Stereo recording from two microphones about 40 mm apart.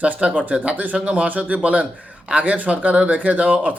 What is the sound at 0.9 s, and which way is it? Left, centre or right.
Speech, right.